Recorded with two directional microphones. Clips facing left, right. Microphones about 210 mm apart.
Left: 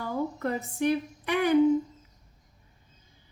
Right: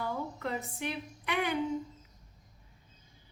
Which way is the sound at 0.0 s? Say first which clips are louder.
Left 6 dB; 45° left (ahead or behind).